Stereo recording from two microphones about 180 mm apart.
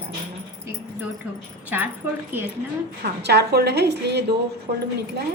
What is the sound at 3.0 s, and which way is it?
A woman's voice, 65° right (ahead or behind).